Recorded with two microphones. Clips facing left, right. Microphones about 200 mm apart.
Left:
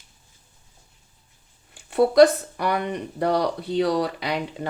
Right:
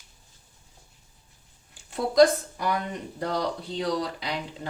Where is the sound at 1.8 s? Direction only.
65° left (ahead or behind).